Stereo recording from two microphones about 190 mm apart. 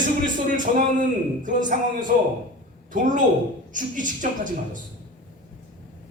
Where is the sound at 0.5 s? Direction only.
45° right (ahead or behind).